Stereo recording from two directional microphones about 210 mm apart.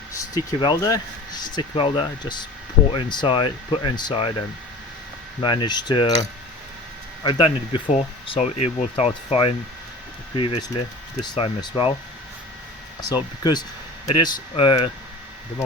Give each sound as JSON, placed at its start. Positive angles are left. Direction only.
{"t": 0.1, "sound": "speech", "side_deg": 20}
{"t": 5.4, "sound": "speech", "side_deg": 20}
{"t": 7.3, "sound": "speech", "side_deg": 20}
{"t": 13.0, "sound": "speech", "side_deg": 20}